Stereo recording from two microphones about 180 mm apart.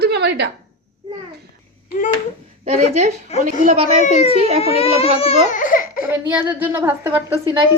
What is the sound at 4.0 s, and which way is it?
Speech, 35° left (ahead or behind).